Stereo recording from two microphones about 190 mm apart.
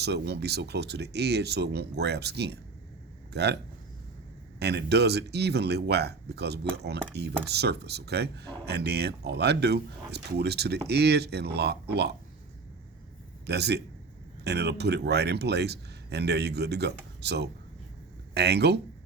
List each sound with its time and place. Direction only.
0.0 s speech: 60° right (ahead or behind)
4.6 s speech: 60° right (ahead or behind)
13.4 s a man's voice: 60° right (ahead or behind)